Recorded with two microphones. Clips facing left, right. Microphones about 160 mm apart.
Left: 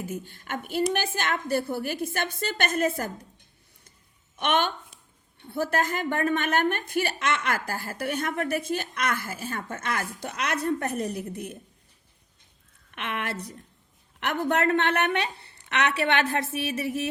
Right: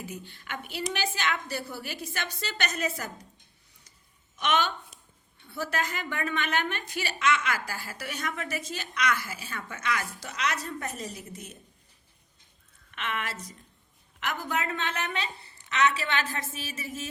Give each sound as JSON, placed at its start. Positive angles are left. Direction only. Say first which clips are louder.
{"t": 0.0, "sound": "a woman's voice", "louder": "left 6 dB", "side_deg": 50}
{"t": 4.4, "sound": "a woman's voice", "louder": "left 2 dB", "side_deg": 55}
{"t": 12.9, "sound": "a woman's voice", "louder": "left 2 dB", "side_deg": 55}